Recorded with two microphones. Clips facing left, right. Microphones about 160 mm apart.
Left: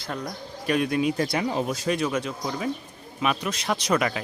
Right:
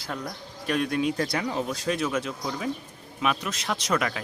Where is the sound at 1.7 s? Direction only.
5° left (ahead or behind).